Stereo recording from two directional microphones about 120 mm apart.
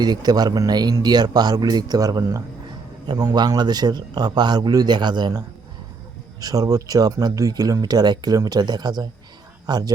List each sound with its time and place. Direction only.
0.0 s speech: 35° right (ahead or behind)